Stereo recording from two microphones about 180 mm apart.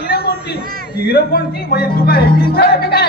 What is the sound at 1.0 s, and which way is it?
Music, 60° left (ahead or behind).